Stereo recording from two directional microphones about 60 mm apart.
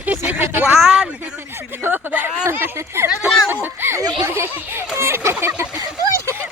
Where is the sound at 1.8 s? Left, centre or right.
Right.